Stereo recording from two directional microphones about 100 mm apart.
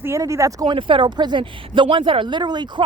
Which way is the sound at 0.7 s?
60° right (ahead or behind).